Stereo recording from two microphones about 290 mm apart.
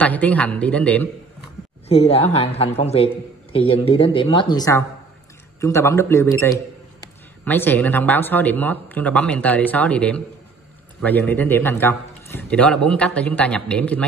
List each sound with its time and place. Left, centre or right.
0.0 s a man's voice: centre
1.9 s a woman's voice: left; by 14.0 s centre